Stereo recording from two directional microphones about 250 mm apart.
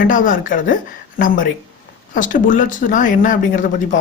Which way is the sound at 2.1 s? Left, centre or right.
Left.